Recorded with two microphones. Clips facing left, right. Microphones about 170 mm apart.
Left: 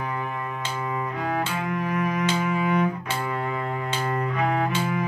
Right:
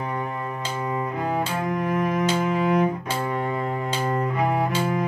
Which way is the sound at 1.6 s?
35° right (ahead or behind).